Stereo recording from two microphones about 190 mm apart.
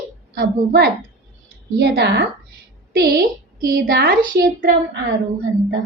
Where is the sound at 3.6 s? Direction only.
55° right (ahead or behind).